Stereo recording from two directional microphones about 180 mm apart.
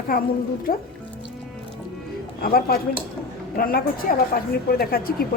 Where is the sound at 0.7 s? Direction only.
55° left (ahead or behind).